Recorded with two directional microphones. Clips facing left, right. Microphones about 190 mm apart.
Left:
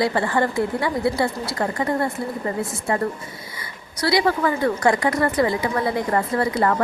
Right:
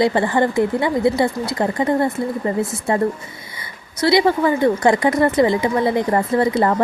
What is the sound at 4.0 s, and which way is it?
A woman's voice, 25° right (ahead or behind).